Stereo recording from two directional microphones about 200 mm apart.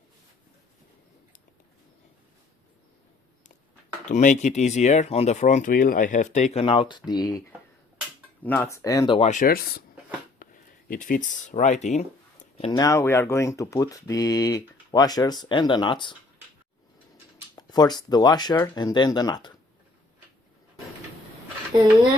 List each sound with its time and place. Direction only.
4.1 s speech: 35° left (ahead or behind); by 7.4 s 20° left (ahead or behind)
8.4 s speech: 10° left (ahead or behind)
9.3 s speech: 45° left (ahead or behind)
10.4 s a sound: 45° left (ahead or behind)
12.7 s speech: 15° left (ahead or behind)
17.5 s speech: 20° left (ahead or behind)